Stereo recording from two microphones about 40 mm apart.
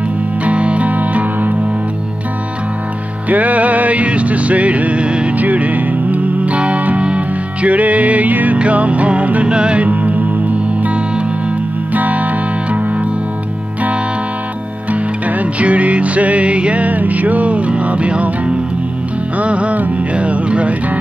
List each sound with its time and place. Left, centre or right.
0.5 s music: right
3.3 s music: right
5.4 s music: right
9.8 s music: right
11.9 s music: right
14.9 s music: right